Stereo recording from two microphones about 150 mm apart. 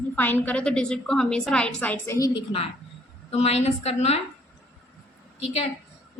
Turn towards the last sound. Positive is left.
turn(degrees=40)  # may be behind; listen again after turning